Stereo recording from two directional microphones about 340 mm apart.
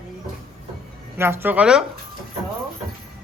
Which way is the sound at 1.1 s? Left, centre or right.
Centre.